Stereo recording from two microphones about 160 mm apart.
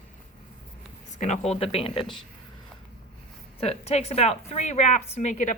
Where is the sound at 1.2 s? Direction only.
45° left (ahead or behind).